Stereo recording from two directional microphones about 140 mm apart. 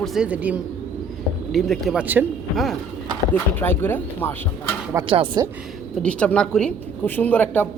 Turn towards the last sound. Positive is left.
turn(degrees=10)  # may be behind; listen again after turning